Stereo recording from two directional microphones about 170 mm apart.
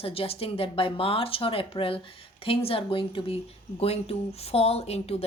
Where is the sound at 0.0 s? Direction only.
35° left (ahead or behind).